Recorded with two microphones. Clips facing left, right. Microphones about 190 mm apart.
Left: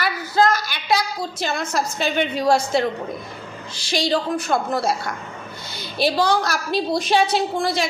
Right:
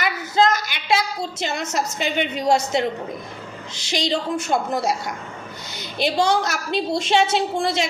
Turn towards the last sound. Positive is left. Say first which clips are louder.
# even
turn(degrees=-25)  # may be behind; listen again after turning